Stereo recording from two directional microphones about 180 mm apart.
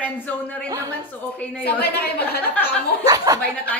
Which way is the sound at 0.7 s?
15° right (ahead or behind).